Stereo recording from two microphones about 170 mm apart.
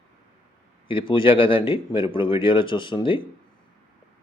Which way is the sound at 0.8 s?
30° left (ahead or behind).